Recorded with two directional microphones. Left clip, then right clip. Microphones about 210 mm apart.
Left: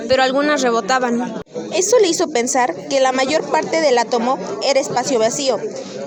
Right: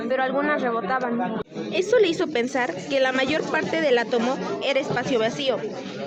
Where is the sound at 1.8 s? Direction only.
20° left (ahead or behind).